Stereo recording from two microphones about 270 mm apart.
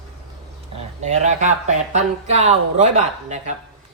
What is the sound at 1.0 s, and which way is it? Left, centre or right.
Speech, right.